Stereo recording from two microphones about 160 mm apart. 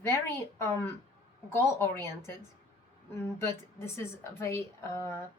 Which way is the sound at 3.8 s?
15° left (ahead or behind).